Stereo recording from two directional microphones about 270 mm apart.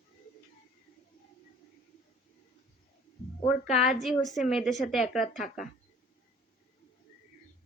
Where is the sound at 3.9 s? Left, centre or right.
Centre.